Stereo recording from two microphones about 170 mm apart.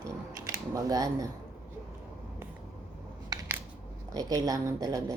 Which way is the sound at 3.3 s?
20° right (ahead or behind).